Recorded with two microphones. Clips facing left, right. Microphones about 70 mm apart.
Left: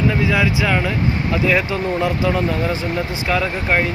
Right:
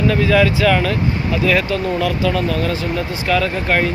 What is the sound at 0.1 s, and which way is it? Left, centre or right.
Speech, centre.